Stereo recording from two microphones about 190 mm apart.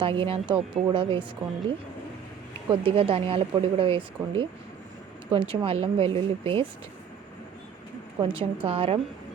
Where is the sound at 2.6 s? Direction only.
30° right (ahead or behind).